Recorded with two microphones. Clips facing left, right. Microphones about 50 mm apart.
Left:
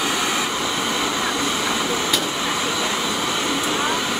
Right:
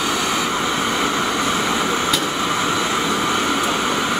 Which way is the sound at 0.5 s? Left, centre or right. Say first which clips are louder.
Right 3 dB; right.